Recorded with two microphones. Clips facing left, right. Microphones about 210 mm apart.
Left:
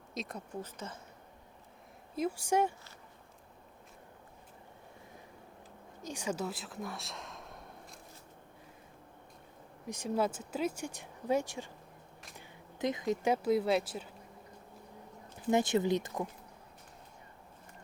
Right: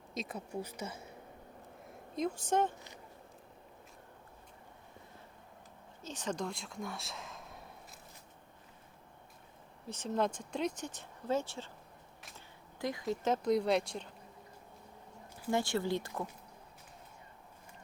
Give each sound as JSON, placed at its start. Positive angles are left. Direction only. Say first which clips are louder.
{"t": 0.1, "sound": "speech", "louder": "right 1 dB", "side_deg": 0}
{"t": 2.1, "sound": "speech", "louder": "left 1 dB", "side_deg": 10}
{"t": 6.0, "sound": "a sound", "louder": "left 2 dB", "side_deg": 10}
{"t": 9.8, "sound": "speech", "louder": "left 1 dB", "side_deg": 10}
{"t": 12.8, "sound": "speech", "louder": "left 3 dB", "side_deg": 20}
{"t": 15.4, "sound": "speech", "louder": "left 4 dB", "side_deg": 20}